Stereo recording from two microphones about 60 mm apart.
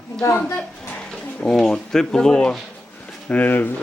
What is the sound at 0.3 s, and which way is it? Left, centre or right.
Speech, left.